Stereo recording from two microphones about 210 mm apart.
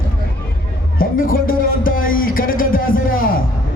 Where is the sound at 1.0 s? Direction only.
45° left (ahead or behind).